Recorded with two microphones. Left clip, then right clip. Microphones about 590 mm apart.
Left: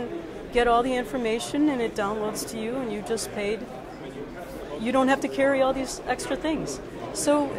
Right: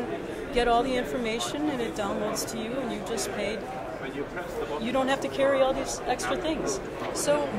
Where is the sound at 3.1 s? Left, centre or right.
Left.